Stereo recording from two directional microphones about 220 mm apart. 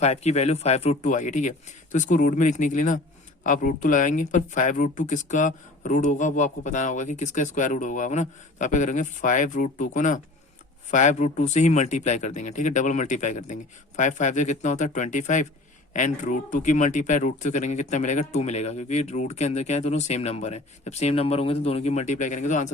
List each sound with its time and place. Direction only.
0.0 s speech: 30° left (ahead or behind)